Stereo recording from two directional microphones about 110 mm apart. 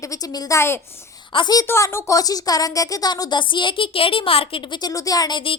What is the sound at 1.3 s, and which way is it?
Speech, 40° left (ahead or behind).